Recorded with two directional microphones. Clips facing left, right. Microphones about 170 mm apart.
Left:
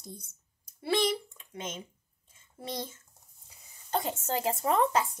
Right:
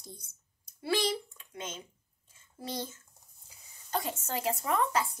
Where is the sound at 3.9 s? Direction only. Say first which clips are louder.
Left 3 dB; 25° left (ahead or behind).